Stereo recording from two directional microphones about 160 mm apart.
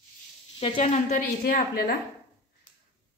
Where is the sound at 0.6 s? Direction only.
40° left (ahead or behind); by 1.9 s 65° left (ahead or behind).